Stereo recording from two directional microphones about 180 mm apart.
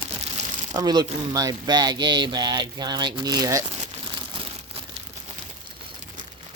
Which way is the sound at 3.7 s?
35° right (ahead or behind).